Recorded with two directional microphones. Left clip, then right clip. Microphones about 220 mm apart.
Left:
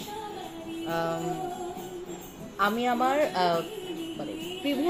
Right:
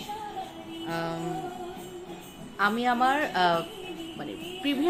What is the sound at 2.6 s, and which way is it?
Speech, 15° right (ahead or behind).